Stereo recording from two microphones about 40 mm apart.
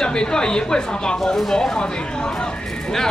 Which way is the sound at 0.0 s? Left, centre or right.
Centre.